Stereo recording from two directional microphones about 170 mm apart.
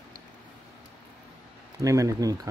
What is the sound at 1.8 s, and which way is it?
Speech, 20° right (ahead or behind).